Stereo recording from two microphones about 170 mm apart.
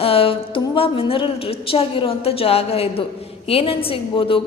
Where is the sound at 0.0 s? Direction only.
35° left (ahead or behind).